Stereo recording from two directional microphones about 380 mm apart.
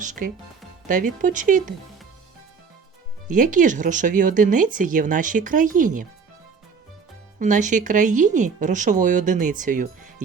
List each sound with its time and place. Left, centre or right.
0.0 s a woman's voice: centre
3.2 s a woman's voice: right
7.3 s a woman's voice: centre